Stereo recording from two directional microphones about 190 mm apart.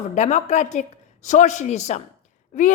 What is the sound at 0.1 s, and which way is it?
A woman's voice, 40° left (ahead or behind).